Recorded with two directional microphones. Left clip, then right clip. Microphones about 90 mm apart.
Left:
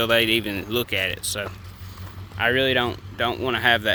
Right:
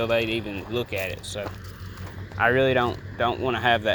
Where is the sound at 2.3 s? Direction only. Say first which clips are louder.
Even; 85° left.